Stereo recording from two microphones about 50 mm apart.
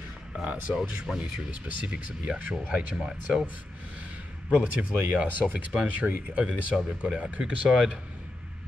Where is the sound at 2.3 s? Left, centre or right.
Right.